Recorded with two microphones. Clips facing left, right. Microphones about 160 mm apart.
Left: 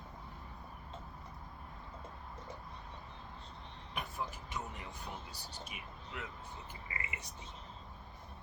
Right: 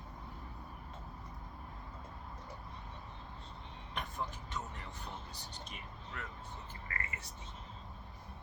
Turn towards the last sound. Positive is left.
turn(degrees=15)  # may be behind; listen again after turning